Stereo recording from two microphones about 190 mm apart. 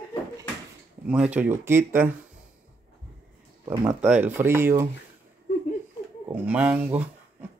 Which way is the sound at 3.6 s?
25° right (ahead or behind).